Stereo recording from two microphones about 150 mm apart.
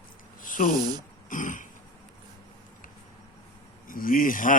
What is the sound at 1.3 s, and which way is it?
Speech, 60° left (ahead or behind).